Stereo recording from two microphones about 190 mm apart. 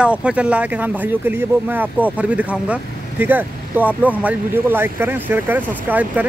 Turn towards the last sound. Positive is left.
turn(degrees=-10)  # may be behind; listen again after turning